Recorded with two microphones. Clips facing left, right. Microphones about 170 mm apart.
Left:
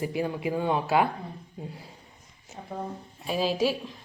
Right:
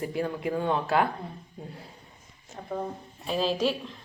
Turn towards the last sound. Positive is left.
turn(degrees=5)  # may be behind; listen again after turning